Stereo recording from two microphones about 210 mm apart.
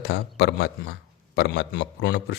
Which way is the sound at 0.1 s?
55° left (ahead or behind).